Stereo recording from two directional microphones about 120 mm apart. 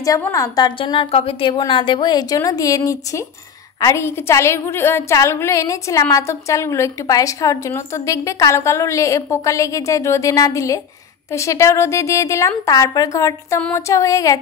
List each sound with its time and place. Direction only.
0.2 s a woman's voice: 30° left (ahead or behind)